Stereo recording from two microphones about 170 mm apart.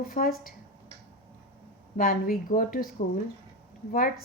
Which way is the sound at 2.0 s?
60° left (ahead or behind).